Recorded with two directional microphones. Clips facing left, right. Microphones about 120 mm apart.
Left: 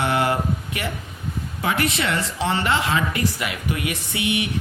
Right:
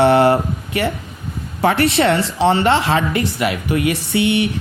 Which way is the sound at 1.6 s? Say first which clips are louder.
Right 9 dB; 35° right (ahead or behind).